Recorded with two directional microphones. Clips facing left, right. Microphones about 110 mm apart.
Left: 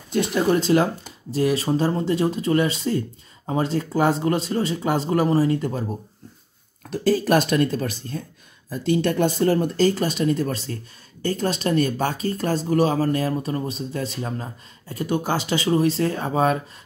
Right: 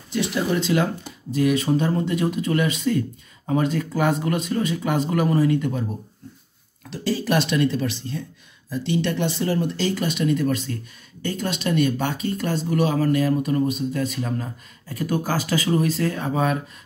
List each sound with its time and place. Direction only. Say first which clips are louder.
0.1 s speech: left 3 dB; 45° left (ahead or behind)
6.9 s speech: left 4 dB; 45° left (ahead or behind)